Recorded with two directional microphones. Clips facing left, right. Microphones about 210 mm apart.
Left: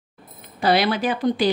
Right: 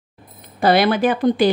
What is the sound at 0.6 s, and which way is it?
Speech, 50° right (ahead or behind).